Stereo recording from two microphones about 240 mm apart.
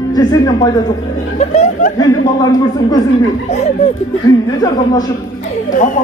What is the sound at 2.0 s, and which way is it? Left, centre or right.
Speech, centre.